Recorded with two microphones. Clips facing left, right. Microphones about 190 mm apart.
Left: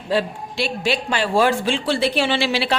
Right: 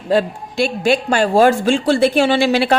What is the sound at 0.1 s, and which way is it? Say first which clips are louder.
A man's voice: right 5 dB; 45° right (ahead or behind).